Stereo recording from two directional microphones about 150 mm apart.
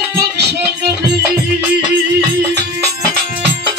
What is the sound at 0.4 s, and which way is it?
Music, 90° right.